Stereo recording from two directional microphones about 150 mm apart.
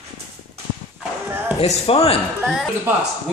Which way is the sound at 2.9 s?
15° right (ahead or behind).